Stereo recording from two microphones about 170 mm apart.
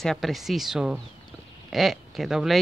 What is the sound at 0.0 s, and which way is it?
A woman's voice, centre (ahead or behind).